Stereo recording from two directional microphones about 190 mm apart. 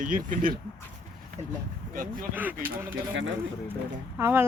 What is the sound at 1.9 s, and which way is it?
Speech, 45° right (ahead or behind).